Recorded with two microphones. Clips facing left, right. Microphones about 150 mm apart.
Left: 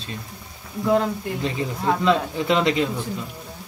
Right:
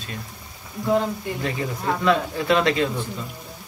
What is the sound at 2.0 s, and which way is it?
Speech, 20° left (ahead or behind).